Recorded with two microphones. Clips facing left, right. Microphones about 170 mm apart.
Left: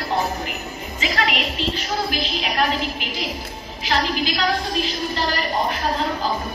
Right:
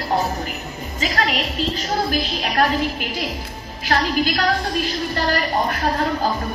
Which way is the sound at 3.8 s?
50° right (ahead or behind).